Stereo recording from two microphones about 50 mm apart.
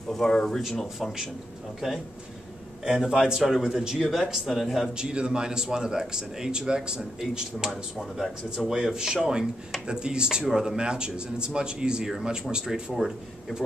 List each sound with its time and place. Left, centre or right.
0.2 s speech: centre
0.9 s speech: centre
2.8 s speech: centre
4.9 s speech: centre